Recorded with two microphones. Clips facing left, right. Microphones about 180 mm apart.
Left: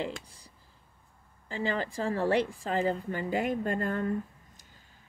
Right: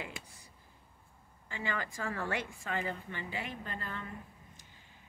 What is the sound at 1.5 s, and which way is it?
Speech, 35° left (ahead or behind).